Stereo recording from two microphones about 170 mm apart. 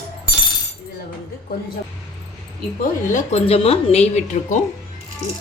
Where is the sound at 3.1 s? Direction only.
40° left (ahead or behind).